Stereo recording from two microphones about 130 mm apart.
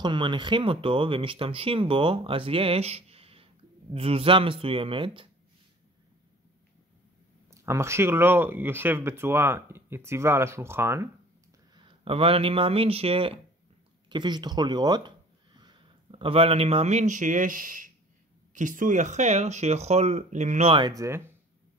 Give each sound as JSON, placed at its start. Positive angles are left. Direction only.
{"t": 0.0, "sound": "speech", "side_deg": -35}
{"t": 7.5, "sound": "speech", "side_deg": -20}
{"t": 11.7, "sound": "speech", "side_deg": -40}
{"t": 14.0, "sound": "speech", "side_deg": -35}
{"t": 18.5, "sound": "speech", "side_deg": -80}
{"t": 20.9, "sound": "speech", "side_deg": -25}